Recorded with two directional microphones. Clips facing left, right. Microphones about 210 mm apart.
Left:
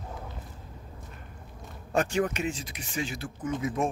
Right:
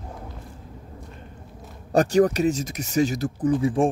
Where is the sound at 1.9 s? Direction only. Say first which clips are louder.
Right 9 dB; 40° right (ahead or behind).